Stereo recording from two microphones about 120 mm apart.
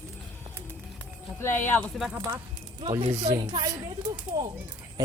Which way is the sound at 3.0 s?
60° right (ahead or behind).